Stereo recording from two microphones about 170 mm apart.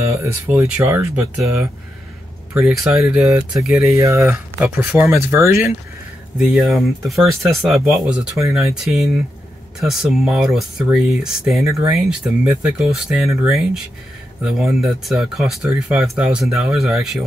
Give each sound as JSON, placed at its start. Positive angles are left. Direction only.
{"t": 0.0, "sound": "speech", "side_deg": -15}
{"t": 3.9, "sound": "speech", "side_deg": -15}
{"t": 6.3, "sound": "speech", "side_deg": 0}